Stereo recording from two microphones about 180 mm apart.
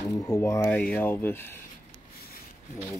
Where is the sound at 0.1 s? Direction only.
15° left (ahead or behind).